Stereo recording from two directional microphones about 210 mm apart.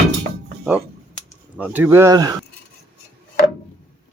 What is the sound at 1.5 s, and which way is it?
Speech, 5° right (ahead or behind).